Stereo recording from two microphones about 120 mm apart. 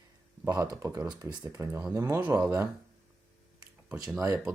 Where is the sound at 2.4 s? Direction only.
30° right (ahead or behind).